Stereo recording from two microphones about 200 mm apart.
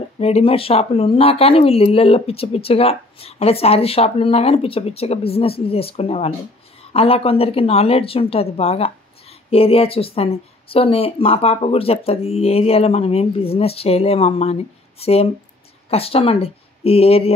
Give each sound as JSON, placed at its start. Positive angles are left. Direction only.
{"t": 0.2, "sound": "speech", "side_deg": 30}